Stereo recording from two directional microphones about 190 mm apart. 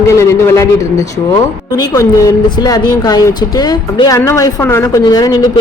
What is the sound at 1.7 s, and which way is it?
A woman's voice, 15° left (ahead or behind).